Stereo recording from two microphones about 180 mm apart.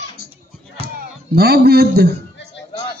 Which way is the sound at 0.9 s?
60° right (ahead or behind).